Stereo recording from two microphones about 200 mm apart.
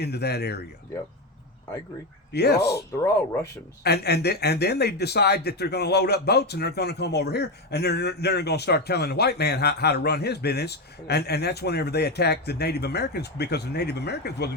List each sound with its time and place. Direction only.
0.0 s speech: 55° left (ahead or behind)
2.3 s speech: 55° left (ahead or behind)
3.8 s speech: 55° left (ahead or behind)